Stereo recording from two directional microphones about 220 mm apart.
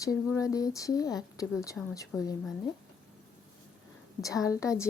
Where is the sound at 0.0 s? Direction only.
15° left (ahead or behind).